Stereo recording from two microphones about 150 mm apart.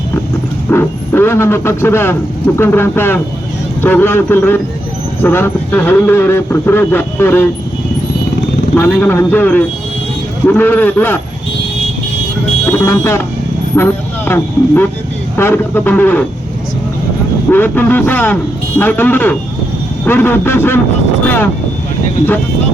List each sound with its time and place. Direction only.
0.7 s speech: 15° left (ahead or behind)
8.7 s speech: 10° left (ahead or behind)
12.6 s speech: 15° left (ahead or behind)
15.4 s speech: 15° left (ahead or behind)
17.5 s speech: 15° left (ahead or behind)